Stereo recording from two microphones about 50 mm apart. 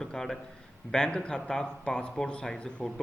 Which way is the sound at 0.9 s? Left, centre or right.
Centre.